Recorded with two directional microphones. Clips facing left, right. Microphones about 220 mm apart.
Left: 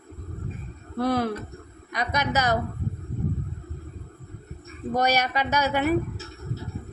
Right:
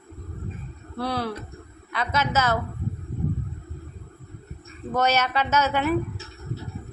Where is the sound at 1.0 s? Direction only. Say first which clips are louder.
Left 4 dB; 45° left (ahead or behind).